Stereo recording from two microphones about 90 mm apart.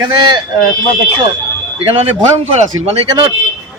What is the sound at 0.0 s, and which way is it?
Speech, 55° right (ahead or behind).